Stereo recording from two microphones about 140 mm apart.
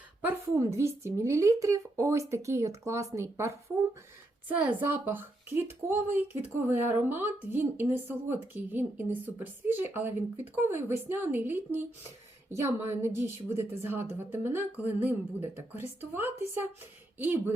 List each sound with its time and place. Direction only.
0.3 s speech: 20° right (ahead or behind)